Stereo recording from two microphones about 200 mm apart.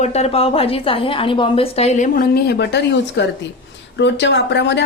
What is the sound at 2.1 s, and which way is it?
Speech, 50° left (ahead or behind).